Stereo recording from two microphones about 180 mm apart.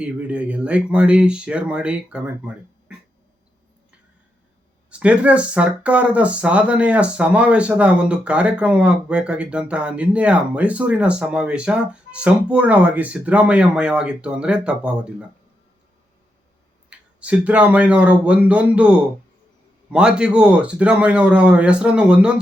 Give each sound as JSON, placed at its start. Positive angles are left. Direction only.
{"t": 0.0, "sound": "speech", "side_deg": -5}
{"t": 4.9, "sound": "speech", "side_deg": -5}
{"t": 16.9, "sound": "a man's voice", "side_deg": -5}